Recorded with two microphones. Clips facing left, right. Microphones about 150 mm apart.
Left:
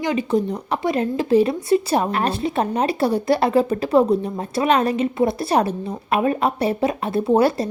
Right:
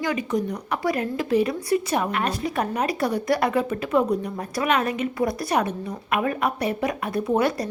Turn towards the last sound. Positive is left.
turn(degrees=30)  # may be behind; listen again after turning